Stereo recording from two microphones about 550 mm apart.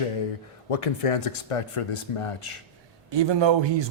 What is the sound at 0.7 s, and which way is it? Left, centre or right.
Speech, left.